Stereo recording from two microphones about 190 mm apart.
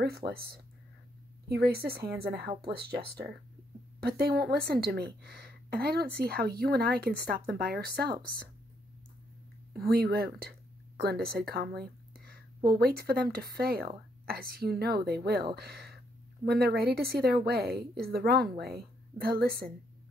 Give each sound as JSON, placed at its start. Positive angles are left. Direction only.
{"t": 0.2, "sound": "speech", "side_deg": -30}
{"t": 1.5, "sound": "speech", "side_deg": -55}
{"t": 4.0, "sound": "speech", "side_deg": -55}
{"t": 9.8, "sound": "speech", "side_deg": -55}